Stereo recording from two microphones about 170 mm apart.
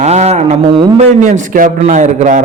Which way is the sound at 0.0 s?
40° right (ahead or behind).